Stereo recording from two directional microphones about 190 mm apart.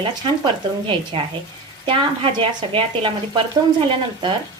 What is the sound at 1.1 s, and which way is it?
A woman's voice, 25° right (ahead or behind).